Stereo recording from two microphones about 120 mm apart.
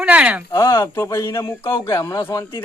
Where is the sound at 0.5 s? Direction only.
20° left (ahead or behind).